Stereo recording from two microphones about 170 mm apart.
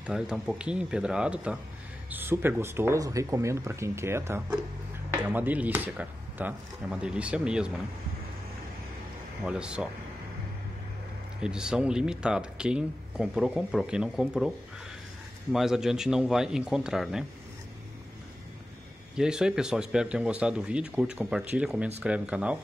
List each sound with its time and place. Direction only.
0.0 s speech: 5° right (ahead or behind)
9.4 s speech: 5° right (ahead or behind)
11.4 s speech: 5° right (ahead or behind)
15.5 s speech: centre (ahead or behind)
19.1 s speech: 5° right (ahead or behind)